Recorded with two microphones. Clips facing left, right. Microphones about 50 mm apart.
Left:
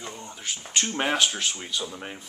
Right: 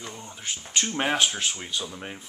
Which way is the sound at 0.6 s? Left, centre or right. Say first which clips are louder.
Even; centre.